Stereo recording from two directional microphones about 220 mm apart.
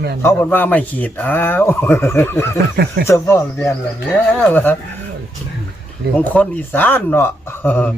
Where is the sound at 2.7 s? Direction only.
45° right (ahead or behind).